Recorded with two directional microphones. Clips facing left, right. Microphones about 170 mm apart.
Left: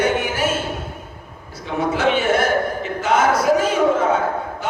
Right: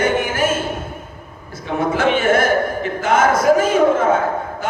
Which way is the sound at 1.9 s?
50° right (ahead or behind).